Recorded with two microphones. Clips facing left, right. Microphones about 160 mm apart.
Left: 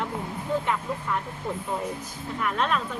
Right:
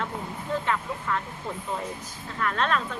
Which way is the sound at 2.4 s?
10° left (ahead or behind).